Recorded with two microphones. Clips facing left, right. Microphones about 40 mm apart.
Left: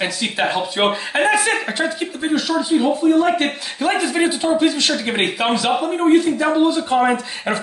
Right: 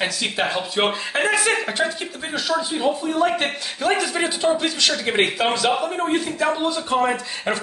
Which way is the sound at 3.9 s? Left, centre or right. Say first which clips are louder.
Left 3 dB; centre.